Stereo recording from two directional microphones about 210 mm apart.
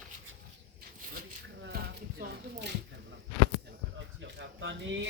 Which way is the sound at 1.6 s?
50° right (ahead or behind).